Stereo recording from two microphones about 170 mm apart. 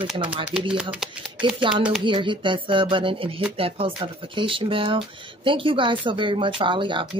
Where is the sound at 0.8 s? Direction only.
5° right (ahead or behind).